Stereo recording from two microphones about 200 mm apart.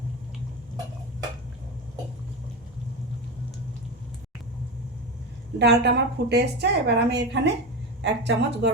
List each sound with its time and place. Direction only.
5.5 s a woman's voice: 55° right (ahead or behind)